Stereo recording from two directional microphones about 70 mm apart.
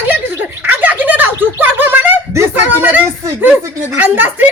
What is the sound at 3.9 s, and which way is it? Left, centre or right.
Speech, right.